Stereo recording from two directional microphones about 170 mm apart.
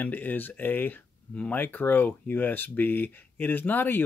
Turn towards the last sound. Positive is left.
turn(degrees=10)  # may be behind; listen again after turning